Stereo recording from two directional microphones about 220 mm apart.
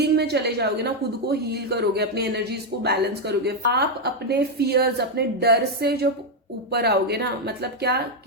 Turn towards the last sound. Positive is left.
turn(degrees=-45)  # may be behind; listen again after turning